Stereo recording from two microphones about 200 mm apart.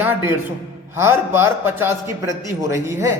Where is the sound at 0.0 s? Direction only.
10° right (ahead or behind).